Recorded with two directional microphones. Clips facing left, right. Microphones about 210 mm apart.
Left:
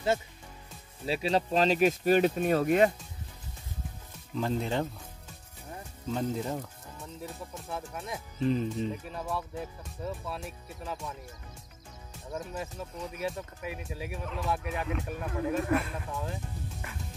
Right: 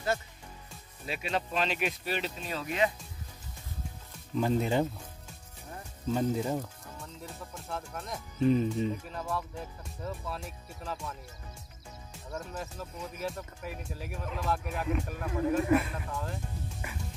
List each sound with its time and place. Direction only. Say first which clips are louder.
1.0 s speech: left 6 dB; 30° left (ahead or behind); by 2.9 s 50° left (ahead or behind)
4.4 s speech: right 3 dB; 5° right (ahead or behind)
6.1 s speech: right 2 dB; 5° right (ahead or behind)
12.3 s speech: left 2 dB; 15° left (ahead or behind)
13.2 s speech: left 2 dB; centre (ahead or behind)